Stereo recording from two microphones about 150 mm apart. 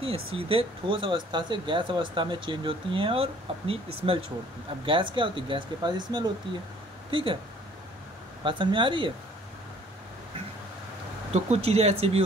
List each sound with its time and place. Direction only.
0.0 s speech: 40° right (ahead or behind)
8.5 s speech: 35° right (ahead or behind)
11.3 s speech: 45° right (ahead or behind)